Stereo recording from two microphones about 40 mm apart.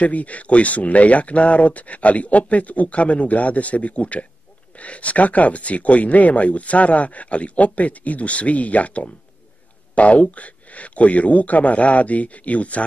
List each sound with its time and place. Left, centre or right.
0.0 s speech: left